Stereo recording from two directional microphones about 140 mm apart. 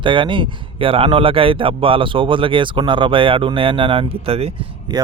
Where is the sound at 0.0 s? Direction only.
35° right (ahead or behind).